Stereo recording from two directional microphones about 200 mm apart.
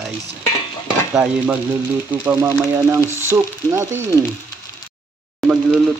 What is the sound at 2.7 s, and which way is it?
Sizzle, 10° right (ahead or behind).